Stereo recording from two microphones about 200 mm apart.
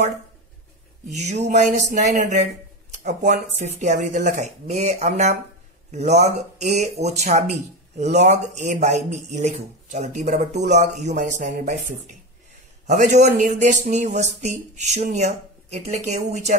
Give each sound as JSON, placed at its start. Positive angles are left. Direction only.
{"t": 1.0, "sound": "speech", "side_deg": -35}